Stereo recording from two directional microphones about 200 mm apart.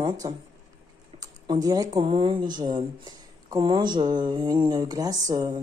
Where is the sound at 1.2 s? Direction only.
20° right (ahead or behind).